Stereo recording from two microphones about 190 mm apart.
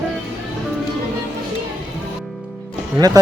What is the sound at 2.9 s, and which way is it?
Speech, 20° right (ahead or behind).